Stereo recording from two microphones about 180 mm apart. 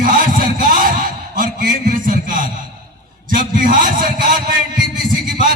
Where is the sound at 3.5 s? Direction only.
50° right (ahead or behind).